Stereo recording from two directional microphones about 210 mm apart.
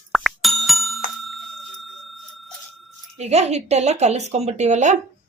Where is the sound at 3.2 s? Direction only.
30° right (ahead or behind).